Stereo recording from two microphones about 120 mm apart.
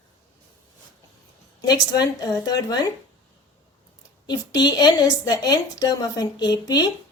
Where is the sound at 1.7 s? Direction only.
35° left (ahead or behind).